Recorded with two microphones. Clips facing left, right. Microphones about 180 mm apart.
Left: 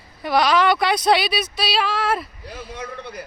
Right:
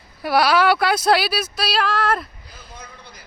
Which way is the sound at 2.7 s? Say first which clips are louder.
Left 9 dB; 75° left (ahead or behind).